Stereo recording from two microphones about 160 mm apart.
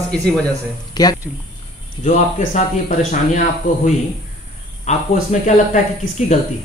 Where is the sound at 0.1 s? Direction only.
5° left (ahead or behind).